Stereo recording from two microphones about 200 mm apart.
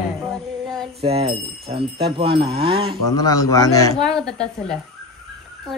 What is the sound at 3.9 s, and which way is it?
Speech, 5° left (ahead or behind).